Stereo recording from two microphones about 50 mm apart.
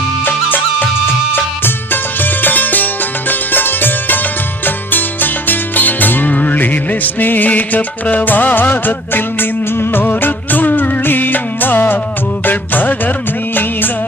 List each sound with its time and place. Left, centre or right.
0.3 s music: left
12.5 s music of bollywood: left